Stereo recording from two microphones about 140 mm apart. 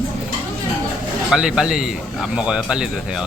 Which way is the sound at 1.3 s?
5° right (ahead or behind).